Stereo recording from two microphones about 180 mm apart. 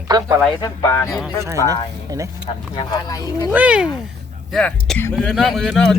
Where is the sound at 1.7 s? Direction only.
20° right (ahead or behind).